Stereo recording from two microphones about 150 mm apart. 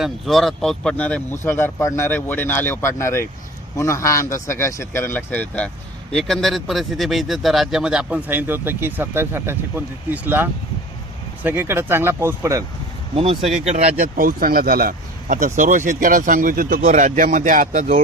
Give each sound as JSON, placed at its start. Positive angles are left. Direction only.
{"t": 0.0, "sound": "speech", "side_deg": 0}
{"t": 13.1, "sound": "speech", "side_deg": -40}
{"t": 14.0, "sound": "speech", "side_deg": -70}